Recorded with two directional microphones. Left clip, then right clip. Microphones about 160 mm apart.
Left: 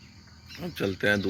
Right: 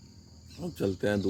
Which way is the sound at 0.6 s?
20° right (ahead or behind).